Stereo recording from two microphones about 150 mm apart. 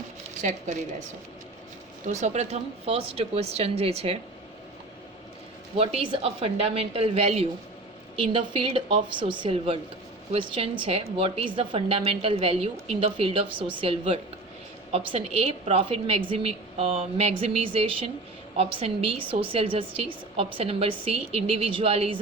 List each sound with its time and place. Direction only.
2.0 s speech: 50° right (ahead or behind)
5.7 s a woman's voice: 40° right (ahead or behind)